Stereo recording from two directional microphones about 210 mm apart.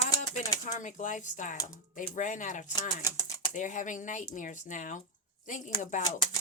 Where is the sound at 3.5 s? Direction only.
35° left (ahead or behind).